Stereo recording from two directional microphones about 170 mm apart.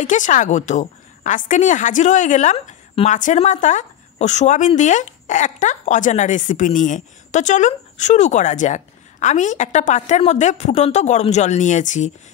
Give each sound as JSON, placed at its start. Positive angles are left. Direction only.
{"t": 0.0, "sound": "a woman's voice", "side_deg": 50}